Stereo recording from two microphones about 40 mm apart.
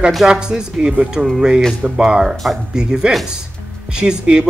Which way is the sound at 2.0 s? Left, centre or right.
Centre.